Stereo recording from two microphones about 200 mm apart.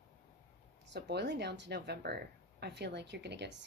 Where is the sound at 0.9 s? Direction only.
60° right (ahead or behind).